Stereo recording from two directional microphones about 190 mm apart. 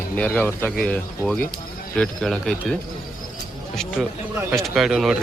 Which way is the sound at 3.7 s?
Centre (ahead or behind).